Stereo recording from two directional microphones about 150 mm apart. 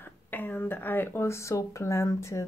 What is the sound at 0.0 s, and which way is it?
Speech, 15° left (ahead or behind).